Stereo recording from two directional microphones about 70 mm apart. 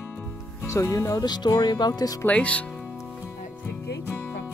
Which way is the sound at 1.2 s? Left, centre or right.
Left.